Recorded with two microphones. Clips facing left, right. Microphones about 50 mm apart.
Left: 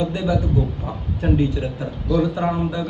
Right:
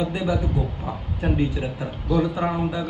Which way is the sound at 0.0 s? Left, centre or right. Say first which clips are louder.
Left 2 dB; centre.